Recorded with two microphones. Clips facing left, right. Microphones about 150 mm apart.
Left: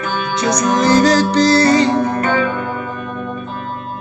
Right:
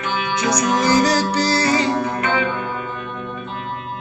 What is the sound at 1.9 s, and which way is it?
Music, 40° left (ahead or behind).